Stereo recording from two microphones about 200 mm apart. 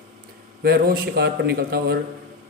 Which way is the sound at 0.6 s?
50° right (ahead or behind).